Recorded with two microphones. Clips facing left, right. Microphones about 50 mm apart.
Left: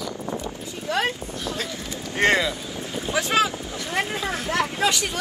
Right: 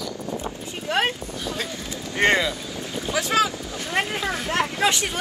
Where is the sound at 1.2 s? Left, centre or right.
Centre.